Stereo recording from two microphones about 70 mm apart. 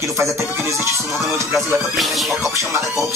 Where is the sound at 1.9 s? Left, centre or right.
Centre.